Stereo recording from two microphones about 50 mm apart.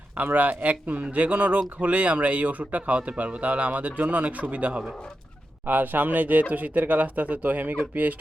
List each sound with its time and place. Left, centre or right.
0.3 s speech: right